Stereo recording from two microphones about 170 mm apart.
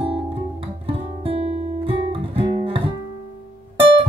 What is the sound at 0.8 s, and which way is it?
Guitar, 35° right (ahead or behind).